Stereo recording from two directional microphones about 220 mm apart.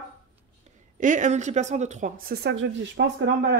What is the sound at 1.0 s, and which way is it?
Speech, 35° right (ahead or behind).